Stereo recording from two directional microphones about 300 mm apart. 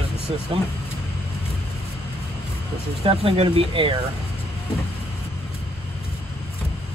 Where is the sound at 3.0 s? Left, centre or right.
Centre.